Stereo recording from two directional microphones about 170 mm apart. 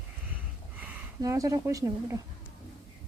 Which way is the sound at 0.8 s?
10° right (ahead or behind).